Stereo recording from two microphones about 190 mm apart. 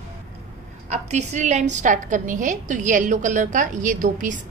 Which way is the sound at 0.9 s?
35° right (ahead or behind).